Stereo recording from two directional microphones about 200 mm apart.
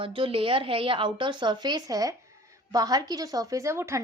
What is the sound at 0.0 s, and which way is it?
A woman's voice, 25° right (ahead or behind).